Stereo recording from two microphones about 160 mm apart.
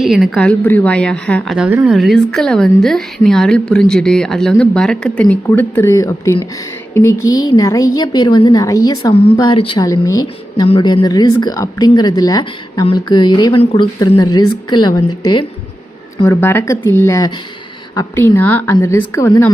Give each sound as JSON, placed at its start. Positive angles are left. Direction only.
{"t": 0.0, "sound": "a woman's voice", "side_deg": 0}
{"t": 1.5, "sound": "a woman's voice", "side_deg": -5}
{"t": 9.1, "sound": "speech", "side_deg": 35}
{"t": 9.8, "sound": "a woman's voice", "side_deg": 20}
{"t": 10.7, "sound": "a woman's voice", "side_deg": 35}
{"t": 16.2, "sound": "a woman's voice", "side_deg": 15}